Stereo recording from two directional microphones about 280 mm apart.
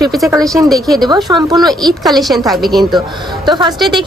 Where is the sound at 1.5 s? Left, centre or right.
Centre.